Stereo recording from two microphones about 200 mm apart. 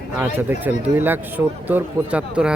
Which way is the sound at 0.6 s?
10° right (ahead or behind).